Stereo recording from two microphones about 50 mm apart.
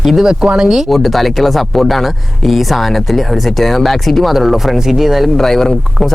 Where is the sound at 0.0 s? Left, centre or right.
Centre.